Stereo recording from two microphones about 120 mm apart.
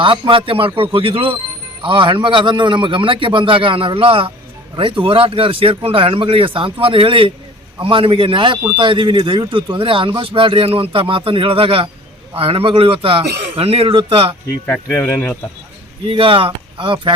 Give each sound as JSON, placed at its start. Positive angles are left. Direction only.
{"t": 0.0, "sound": "speech", "side_deg": -45}
{"t": 14.7, "sound": "speech", "side_deg": 15}
{"t": 16.0, "sound": "speech", "side_deg": -45}